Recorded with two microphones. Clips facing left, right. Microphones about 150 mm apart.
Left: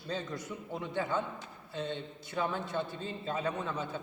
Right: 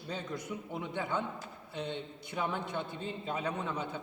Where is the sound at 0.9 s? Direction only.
15° right (ahead or behind).